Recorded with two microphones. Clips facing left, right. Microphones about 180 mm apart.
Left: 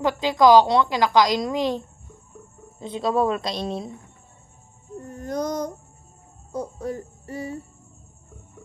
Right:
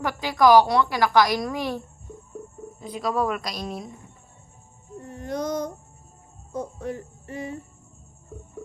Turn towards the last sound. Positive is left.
turn(degrees=40)  # may be behind; listen again after turning